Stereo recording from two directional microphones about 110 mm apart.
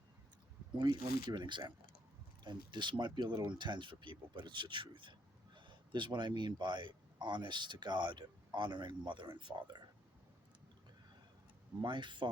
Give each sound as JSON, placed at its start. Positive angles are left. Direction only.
{"t": 0.8, "sound": "a man's voice", "side_deg": -40}
{"t": 11.8, "sound": "speech", "side_deg": -45}